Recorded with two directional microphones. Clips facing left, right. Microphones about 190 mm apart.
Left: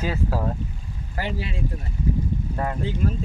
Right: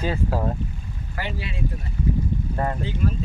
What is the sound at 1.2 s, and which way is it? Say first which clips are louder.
Speech: left 2 dB; 40° left (ahead or behind).